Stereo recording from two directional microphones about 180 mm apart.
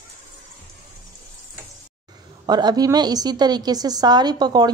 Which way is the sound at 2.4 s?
25° right (ahead or behind).